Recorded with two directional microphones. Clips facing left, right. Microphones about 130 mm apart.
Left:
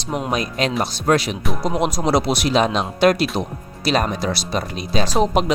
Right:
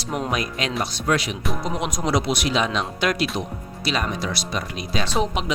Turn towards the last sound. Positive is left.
turn(degrees=40)  # may be behind; listen again after turning